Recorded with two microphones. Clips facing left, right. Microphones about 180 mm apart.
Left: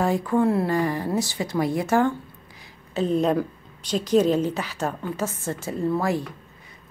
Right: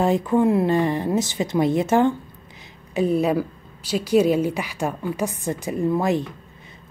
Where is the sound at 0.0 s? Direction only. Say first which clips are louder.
Right 3 dB; 20° right (ahead or behind).